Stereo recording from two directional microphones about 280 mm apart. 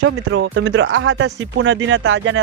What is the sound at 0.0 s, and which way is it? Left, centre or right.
Speech, right.